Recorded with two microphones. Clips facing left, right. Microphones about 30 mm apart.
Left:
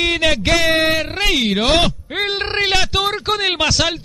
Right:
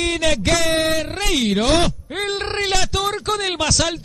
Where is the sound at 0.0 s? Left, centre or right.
Left.